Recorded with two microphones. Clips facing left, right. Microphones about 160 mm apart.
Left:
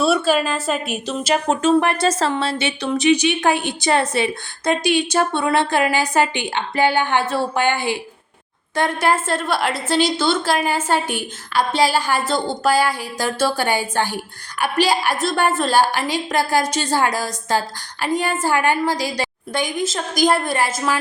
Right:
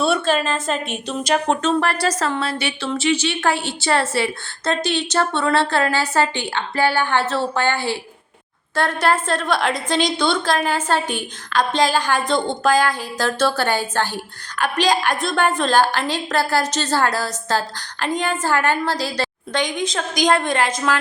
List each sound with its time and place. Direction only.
0.0 s a woman's voice: 5° left (ahead or behind)
1.8 s a woman's voice: 20° left (ahead or behind)